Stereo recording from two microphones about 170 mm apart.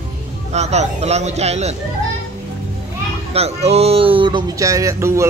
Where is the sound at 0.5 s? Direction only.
40° right (ahead or behind).